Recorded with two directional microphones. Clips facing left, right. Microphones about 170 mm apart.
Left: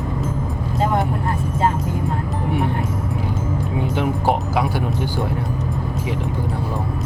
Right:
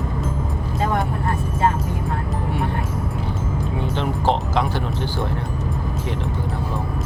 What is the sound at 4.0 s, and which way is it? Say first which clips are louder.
Music: left 1 dB; 10° left (ahead or behind).